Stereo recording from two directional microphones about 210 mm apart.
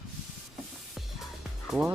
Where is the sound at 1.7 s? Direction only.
5° right (ahead or behind).